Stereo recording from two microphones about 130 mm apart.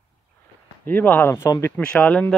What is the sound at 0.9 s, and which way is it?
Speech, 15° left (ahead or behind).